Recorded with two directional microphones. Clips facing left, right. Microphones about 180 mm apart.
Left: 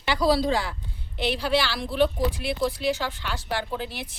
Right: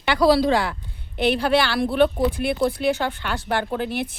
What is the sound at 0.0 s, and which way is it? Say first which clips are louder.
A woman's voice: right 5 dB; 65° right (ahead or behind).